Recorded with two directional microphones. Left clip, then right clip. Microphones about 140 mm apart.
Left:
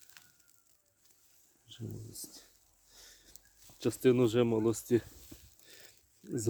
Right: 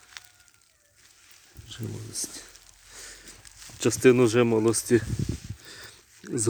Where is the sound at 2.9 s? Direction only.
5° left (ahead or behind).